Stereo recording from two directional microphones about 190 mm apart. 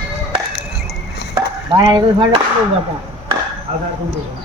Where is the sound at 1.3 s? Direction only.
20° right (ahead or behind).